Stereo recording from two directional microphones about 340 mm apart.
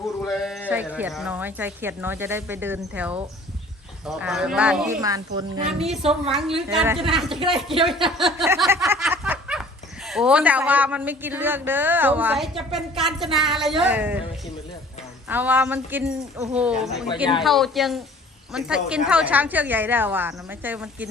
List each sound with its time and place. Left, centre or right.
0.3 s a woman's voice: centre
6.6 s speech: centre
8.0 s snicker: centre
13.0 s speech: centre